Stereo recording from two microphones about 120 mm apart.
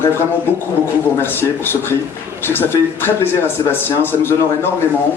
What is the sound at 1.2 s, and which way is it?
A man's voice, 20° left (ahead or behind).